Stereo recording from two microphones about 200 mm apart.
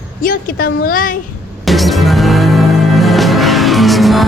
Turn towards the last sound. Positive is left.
turn(degrees=0)  # may be behind; listen again after turning